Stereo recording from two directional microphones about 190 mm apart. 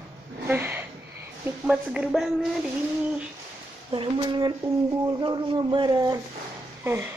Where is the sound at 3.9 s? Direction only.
25° right (ahead or behind).